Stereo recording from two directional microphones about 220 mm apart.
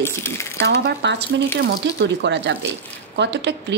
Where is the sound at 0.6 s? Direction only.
50° right (ahead or behind).